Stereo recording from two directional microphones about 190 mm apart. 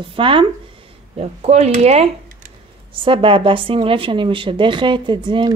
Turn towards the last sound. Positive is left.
turn(degrees=-25)  # may be behind; listen again after turning